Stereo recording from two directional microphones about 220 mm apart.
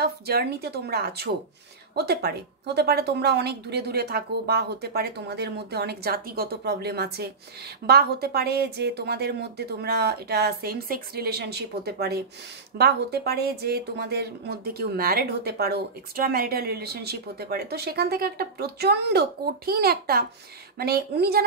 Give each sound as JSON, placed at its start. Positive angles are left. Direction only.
{"t": 0.0, "sound": "speech", "side_deg": -45}